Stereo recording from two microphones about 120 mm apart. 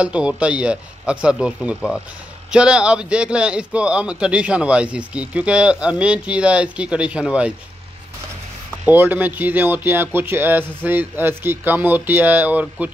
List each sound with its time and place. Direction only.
0.0 s a man's voice: 10° right (ahead or behind)
8.8 s a man's voice: 15° right (ahead or behind)